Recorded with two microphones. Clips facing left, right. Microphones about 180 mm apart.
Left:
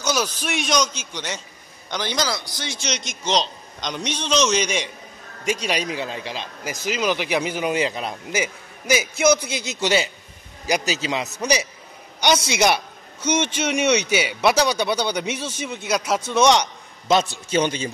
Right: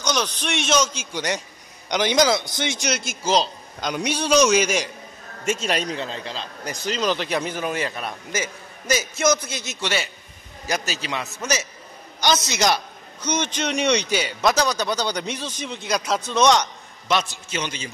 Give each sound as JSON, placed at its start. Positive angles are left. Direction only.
{"t": 0.0, "sound": "a man's voice", "side_deg": 5}
{"t": 2.9, "sound": "a man's voice", "side_deg": -5}
{"t": 5.9, "sound": "a man's voice", "side_deg": 15}